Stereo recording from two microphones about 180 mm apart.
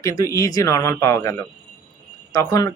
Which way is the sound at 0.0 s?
20° left (ahead or behind).